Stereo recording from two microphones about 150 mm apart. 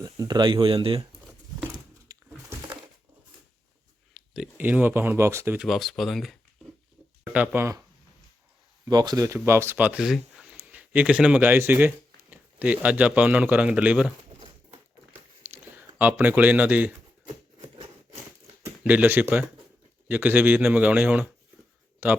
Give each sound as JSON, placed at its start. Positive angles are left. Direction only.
{"t": 0.0, "sound": "speech", "side_deg": -25}
{"t": 1.7, "sound": "a sound", "side_deg": -20}
{"t": 4.1, "sound": "speech", "side_deg": -5}
{"t": 5.5, "sound": "speech", "side_deg": 0}
{"t": 7.3, "sound": "a man's voice", "side_deg": -10}
{"t": 15.4, "sound": "a sound", "side_deg": -15}
{"t": 16.0, "sound": "a man's voice", "side_deg": -10}
{"t": 18.6, "sound": "a man's voice", "side_deg": -10}